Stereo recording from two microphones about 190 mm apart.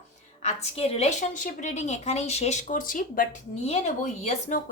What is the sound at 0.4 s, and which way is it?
A woman's voice, 35° left (ahead or behind).